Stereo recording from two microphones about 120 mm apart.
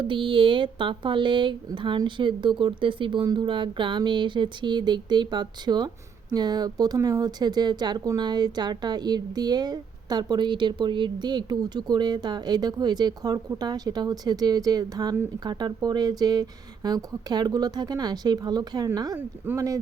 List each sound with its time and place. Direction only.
0.0 s speech: 45° right (ahead or behind); by 19.8 s 25° right (ahead or behind)